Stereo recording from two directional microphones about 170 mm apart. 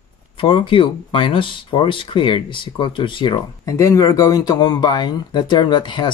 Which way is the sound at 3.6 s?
15° left (ahead or behind).